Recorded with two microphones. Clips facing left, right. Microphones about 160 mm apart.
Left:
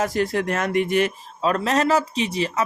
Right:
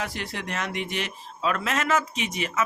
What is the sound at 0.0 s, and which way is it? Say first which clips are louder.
A man's voice: left 11 dB; 45° left (ahead or behind).